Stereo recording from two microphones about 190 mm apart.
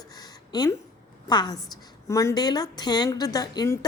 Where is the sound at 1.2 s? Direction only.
20° left (ahead or behind).